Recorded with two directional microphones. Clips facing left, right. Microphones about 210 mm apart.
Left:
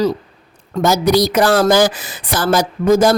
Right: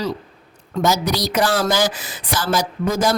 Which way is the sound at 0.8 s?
55° left (ahead or behind).